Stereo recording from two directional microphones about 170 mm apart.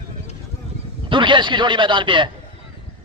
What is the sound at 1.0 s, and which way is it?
A man's voice, 30° right (ahead or behind).